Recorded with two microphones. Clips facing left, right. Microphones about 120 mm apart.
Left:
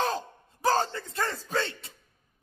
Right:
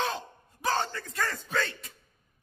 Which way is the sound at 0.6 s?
35° left (ahead or behind).